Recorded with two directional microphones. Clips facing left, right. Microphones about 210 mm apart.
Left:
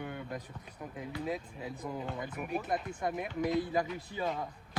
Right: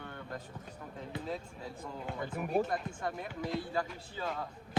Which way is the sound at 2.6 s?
20° left (ahead or behind).